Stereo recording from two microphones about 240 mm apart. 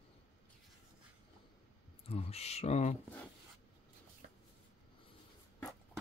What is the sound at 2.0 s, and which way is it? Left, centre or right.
Speech, left.